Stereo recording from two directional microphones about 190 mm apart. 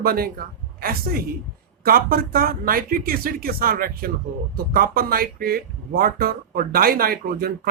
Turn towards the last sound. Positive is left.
turn(degrees=-50)  # may be behind; listen again after turning